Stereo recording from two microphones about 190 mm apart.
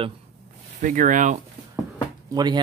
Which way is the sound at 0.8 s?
40° right (ahead or behind).